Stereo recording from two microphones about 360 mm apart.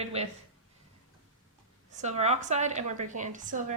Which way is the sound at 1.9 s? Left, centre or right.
Centre.